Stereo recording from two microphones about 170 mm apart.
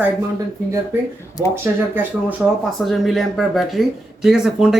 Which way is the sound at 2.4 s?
5° right (ahead or behind).